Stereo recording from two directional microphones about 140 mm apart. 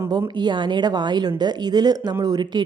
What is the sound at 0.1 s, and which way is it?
Speech, 30° right (ahead or behind).